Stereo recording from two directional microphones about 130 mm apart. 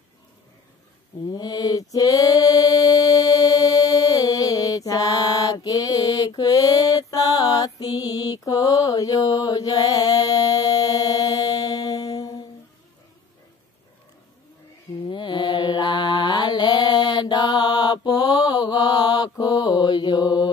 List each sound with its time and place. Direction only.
1.3 s female singing: 30° left (ahead or behind)
15.0 s mantra: 35° left (ahead or behind)